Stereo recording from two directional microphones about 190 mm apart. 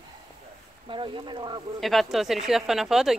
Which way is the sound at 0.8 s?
25° right (ahead or behind).